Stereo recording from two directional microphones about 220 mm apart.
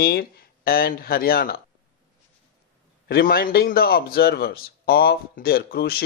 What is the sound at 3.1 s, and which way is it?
A man's voice, 45° left (ahead or behind).